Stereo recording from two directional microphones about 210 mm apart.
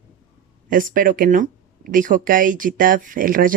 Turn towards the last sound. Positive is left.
turn(degrees=-40)  # may be behind; listen again after turning